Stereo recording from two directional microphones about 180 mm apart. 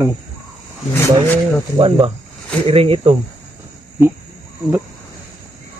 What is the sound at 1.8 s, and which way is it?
Speech, 30° right (ahead or behind).